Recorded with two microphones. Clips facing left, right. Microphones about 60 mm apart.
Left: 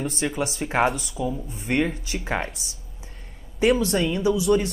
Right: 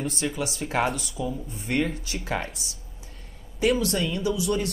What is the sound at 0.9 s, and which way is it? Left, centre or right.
Speech, centre.